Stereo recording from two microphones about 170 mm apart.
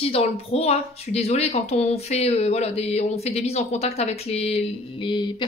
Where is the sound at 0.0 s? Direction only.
35° left (ahead or behind).